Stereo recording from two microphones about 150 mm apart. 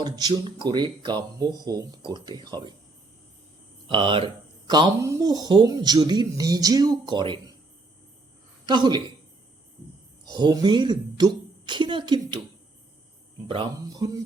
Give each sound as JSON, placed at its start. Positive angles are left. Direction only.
{"t": 0.0, "sound": "speech", "side_deg": -25}
{"t": 3.8, "sound": "speech", "side_deg": -35}
{"t": 8.6, "sound": "a woman's voice", "side_deg": -30}
{"t": 10.2, "sound": "a woman's voice", "side_deg": -30}
{"t": 13.5, "sound": "speech", "side_deg": -30}